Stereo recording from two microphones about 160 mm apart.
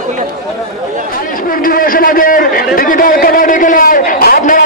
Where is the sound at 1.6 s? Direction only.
65° left (ahead or behind).